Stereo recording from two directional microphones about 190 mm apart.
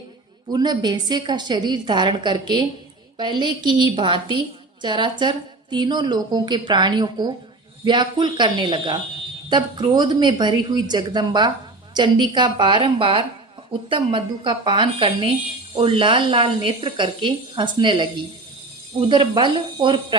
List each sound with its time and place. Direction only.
0.5 s speech: 20° right (ahead or behind)